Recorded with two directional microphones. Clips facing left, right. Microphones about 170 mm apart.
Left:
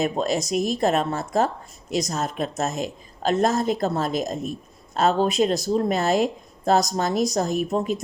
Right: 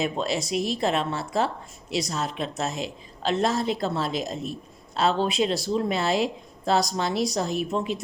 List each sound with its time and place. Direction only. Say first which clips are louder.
0.0 s speech: left 3 dB; 45° left (ahead or behind)